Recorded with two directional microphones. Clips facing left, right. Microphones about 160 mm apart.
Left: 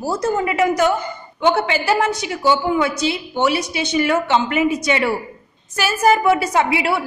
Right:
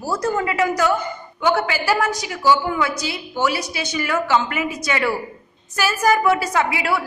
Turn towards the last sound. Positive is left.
turn(degrees=25)  # may be behind; listen again after turning